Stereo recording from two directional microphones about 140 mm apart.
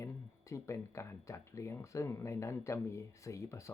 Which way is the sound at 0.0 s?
20° left (ahead or behind).